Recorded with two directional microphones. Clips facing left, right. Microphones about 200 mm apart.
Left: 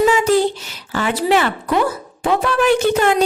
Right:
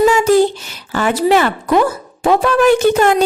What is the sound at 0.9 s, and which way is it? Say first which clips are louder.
A woman's voice: right 3 dB; 45° right (ahead or behind).